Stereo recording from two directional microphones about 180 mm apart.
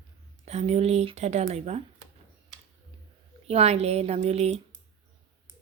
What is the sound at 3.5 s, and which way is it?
Speech, 35° right (ahead or behind).